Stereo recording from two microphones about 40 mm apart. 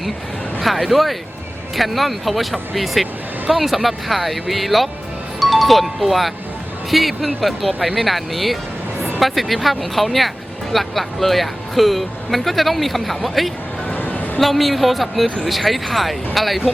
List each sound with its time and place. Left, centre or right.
0.6 s speech: centre
13.9 s music: left
14.3 s speech: centre